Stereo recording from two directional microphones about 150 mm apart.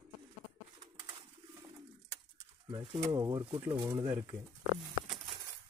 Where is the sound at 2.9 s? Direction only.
25° right (ahead or behind).